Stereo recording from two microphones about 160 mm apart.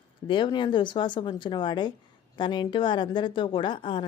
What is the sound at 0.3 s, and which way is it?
A woman's voice, 30° left (ahead or behind).